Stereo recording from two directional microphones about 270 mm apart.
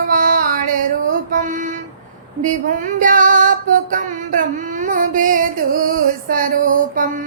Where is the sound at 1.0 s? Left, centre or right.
Right.